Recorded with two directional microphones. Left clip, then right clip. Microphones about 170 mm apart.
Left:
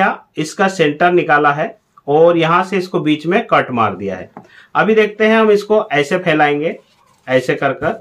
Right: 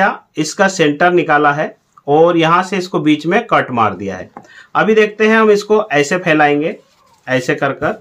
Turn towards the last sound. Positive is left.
turn(degrees=-20)  # may be behind; listen again after turning